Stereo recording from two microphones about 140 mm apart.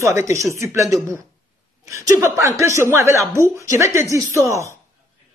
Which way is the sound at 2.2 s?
20° right (ahead or behind).